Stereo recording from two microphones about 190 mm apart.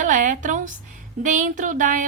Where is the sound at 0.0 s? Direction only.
40° right (ahead or behind).